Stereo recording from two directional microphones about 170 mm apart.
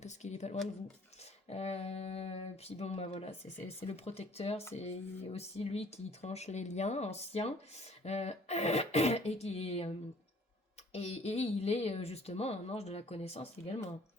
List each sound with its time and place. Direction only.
0.0 s a woman's voice: 40° left (ahead or behind)
10.9 s speech: 40° left (ahead or behind)